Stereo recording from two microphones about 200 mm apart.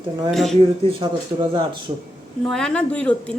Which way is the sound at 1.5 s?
25° right (ahead or behind).